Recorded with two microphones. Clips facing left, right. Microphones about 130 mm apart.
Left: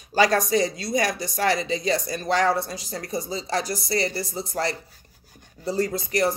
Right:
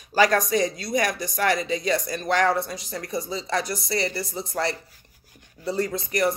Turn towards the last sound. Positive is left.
turn(degrees=35)  # may be behind; listen again after turning